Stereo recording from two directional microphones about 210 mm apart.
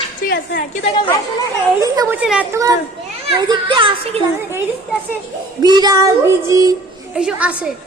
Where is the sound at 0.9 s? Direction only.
20° left (ahead or behind).